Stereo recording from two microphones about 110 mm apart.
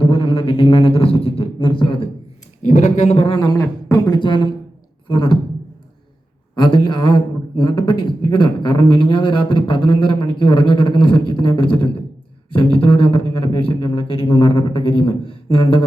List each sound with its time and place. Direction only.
0.0 s a man's voice: 55° left (ahead or behind)
2.9 s speech: 75° left (ahead or behind)
3.5 s a woman's voice: 30° left (ahead or behind)
4.1 s a man's voice: 45° left (ahead or behind)
6.6 s a man's voice: 45° left (ahead or behind)
12.5 s a sound: 55° left (ahead or behind)